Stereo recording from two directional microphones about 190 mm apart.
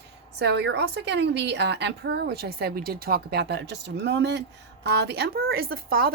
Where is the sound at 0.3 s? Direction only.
65° right (ahead or behind).